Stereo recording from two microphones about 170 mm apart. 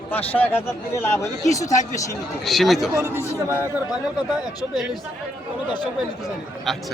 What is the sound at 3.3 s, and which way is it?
Speech, 15° left (ahead or behind).